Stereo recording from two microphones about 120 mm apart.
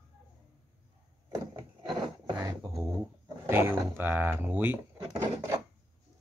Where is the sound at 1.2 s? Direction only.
30° right (ahead or behind).